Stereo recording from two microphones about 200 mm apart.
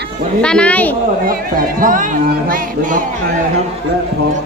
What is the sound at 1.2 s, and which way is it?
Speech, 45° right (ahead or behind).